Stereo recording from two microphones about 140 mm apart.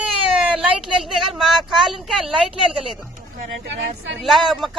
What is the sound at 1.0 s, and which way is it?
A man's voice, centre (ahead or behind).